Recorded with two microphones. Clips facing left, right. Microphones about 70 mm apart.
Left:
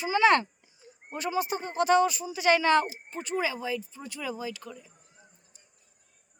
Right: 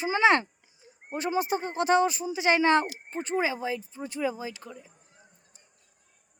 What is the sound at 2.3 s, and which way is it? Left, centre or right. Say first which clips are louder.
Speech: even; right.